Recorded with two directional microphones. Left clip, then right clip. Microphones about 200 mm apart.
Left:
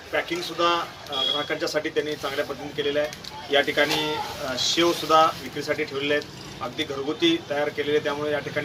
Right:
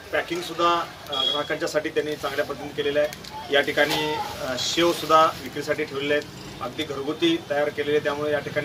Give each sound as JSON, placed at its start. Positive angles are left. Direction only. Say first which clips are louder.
{"t": 0.1, "sound": "speech", "louder": "even", "side_deg": 5}